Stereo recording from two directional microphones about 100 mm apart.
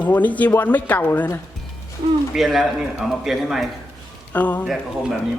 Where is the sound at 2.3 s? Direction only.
5° right (ahead or behind).